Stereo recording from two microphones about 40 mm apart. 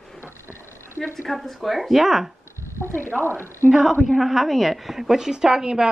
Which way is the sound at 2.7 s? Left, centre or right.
Left.